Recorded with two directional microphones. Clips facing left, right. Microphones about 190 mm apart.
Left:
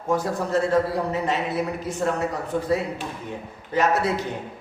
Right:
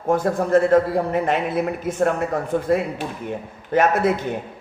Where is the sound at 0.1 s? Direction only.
50° right (ahead or behind).